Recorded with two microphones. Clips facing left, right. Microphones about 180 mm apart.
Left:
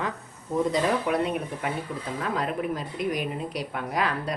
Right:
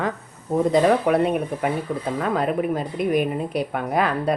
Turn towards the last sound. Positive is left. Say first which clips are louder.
# right 6 dB
turn(degrees=-55)  # may be behind; listen again after turning